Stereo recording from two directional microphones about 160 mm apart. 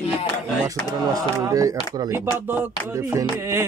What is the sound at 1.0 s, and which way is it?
Speech, 20° right (ahead or behind).